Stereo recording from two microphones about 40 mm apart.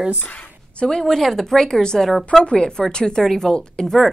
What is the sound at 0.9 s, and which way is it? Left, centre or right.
A woman's voice, centre.